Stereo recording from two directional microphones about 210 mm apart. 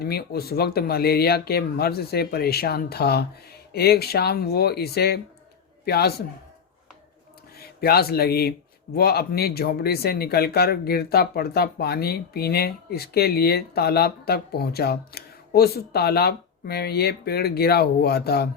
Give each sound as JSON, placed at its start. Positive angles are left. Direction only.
{"t": 0.0, "sound": "speech", "side_deg": 50}
{"t": 7.8, "sound": "speech", "side_deg": 50}